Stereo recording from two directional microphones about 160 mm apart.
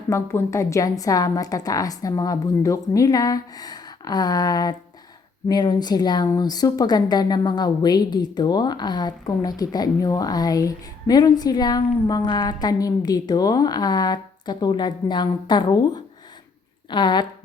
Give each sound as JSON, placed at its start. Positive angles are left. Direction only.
{"t": 0.1, "sound": "a woman's voice", "side_deg": 20}